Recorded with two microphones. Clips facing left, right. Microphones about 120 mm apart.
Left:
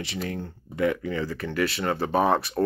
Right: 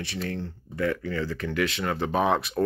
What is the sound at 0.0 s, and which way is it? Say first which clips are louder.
Speech: even; 15° left (ahead or behind).